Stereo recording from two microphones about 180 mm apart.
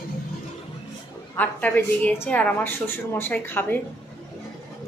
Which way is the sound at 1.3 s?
10° left (ahead or behind).